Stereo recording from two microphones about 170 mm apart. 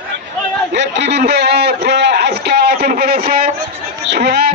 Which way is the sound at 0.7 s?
90° right.